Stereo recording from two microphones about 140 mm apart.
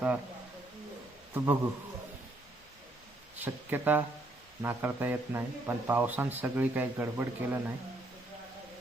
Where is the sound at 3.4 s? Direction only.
15° right (ahead or behind).